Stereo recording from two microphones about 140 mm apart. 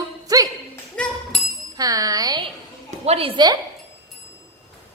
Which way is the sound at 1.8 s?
25° right (ahead or behind).